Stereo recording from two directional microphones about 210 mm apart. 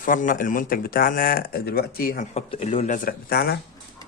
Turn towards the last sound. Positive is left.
turn(degrees=45)  # may be behind; listen again after turning